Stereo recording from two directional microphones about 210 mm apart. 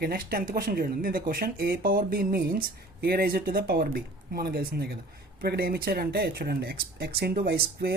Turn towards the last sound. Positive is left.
turn(degrees=-45)  # may be behind; listen again after turning